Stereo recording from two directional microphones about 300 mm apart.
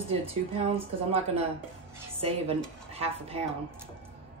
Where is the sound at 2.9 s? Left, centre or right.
Centre.